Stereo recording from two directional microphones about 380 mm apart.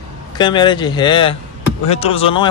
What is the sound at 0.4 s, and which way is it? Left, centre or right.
Speech, centre.